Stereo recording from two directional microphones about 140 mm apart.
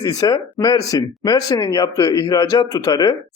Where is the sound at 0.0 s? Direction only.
25° left (ahead or behind).